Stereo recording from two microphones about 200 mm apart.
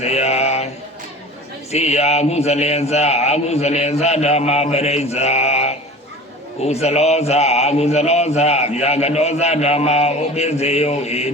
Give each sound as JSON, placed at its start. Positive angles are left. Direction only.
{"t": 0.0, "sound": "mantra", "side_deg": 30}
{"t": 1.7, "sound": "speech", "side_deg": 30}